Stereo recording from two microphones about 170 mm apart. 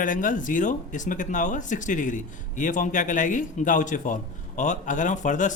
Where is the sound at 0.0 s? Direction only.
50° left (ahead or behind).